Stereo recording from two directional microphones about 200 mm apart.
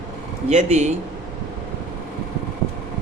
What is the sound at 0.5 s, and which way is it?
Speech, 35° right (ahead or behind).